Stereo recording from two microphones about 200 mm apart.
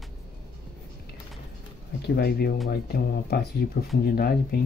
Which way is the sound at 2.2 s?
50° left (ahead or behind).